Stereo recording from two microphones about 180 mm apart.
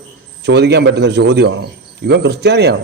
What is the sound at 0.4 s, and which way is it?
A man's voice, 70° right (ahead or behind).